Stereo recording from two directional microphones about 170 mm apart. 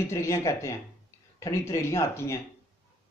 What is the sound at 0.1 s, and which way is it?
Speech, 15° left (ahead or behind).